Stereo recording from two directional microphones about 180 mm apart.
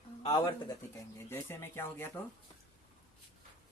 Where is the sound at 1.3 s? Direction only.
15° left (ahead or behind).